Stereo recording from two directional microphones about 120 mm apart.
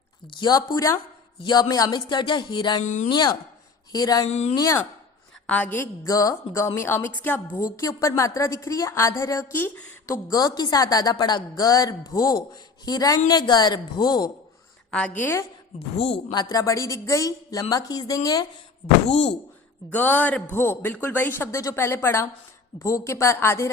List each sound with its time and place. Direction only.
0.3 s a woman's voice: 35° left (ahead or behind)
2.8 s speech: 90° left
3.9 s a woman's voice: 30° left (ahead or behind)
4.3 s speech: 65° left (ahead or behind)
4.5 s a woman's voice: 30° left (ahead or behind)
5.5 s a woman's voice: 10° left (ahead or behind)
7.6 s a woman's voice: 30° left (ahead or behind)
10.2 s a woman's voice: 35° left (ahead or behind)
14.8 s a sound: 10° left (ahead or behind)
15.2 s a woman's voice: 20° left (ahead or behind)
16.0 s speech: 55° left (ahead or behind)
16.3 s a woman's voice: 35° left (ahead or behind)
19.9 s a woman's voice: 15° left (ahead or behind)